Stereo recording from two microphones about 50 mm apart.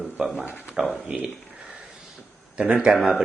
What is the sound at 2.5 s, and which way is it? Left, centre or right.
Speech, right.